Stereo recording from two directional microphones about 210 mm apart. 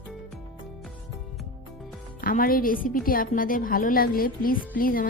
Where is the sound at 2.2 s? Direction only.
45° left (ahead or behind).